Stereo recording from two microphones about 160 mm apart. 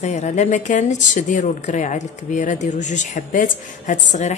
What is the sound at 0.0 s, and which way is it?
Speech, 45° left (ahead or behind).